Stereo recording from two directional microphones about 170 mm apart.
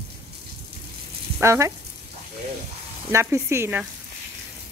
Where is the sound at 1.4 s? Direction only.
15° right (ahead or behind).